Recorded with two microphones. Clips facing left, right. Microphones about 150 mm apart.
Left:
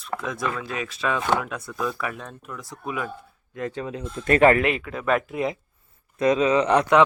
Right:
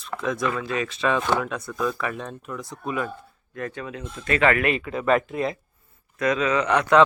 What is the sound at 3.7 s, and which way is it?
Speech, 30° left (ahead or behind).